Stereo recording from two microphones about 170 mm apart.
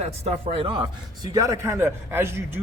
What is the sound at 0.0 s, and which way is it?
Speech, 40° right (ahead or behind).